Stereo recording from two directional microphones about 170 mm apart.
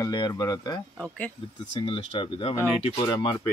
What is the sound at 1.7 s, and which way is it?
Speech, 30° left (ahead or behind).